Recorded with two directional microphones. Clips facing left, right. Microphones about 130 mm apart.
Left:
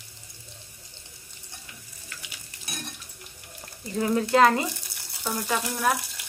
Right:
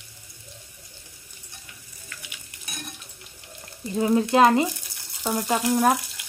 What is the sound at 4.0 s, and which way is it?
Speech, 20° right (ahead or behind).